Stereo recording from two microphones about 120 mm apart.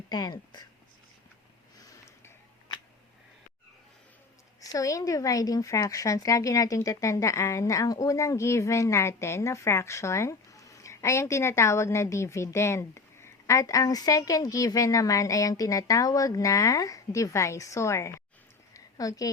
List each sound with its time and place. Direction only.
0.1 s speech: 35° left (ahead or behind)
1.8 s sniff: 25° left (ahead or behind)
4.6 s a woman's voice: 30° left (ahead or behind)
18.7 s a sound: 30° left (ahead or behind)